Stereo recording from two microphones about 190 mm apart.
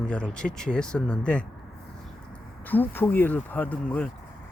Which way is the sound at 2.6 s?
10° left (ahead or behind).